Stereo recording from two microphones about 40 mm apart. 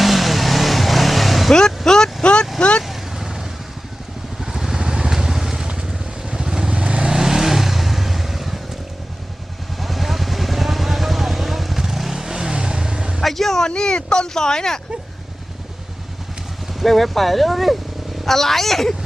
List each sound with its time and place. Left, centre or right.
0.0 s vehicle: centre
1.5 s a sound: centre
2.2 s vehicle: left
2.8 s vehicle: centre; by 7.2 s right
7.2 s vehicle: centre
9.8 s vehicle: centre
13.2 s vehicle: centre
13.7 s a sound: centre
16.8 s speech: centre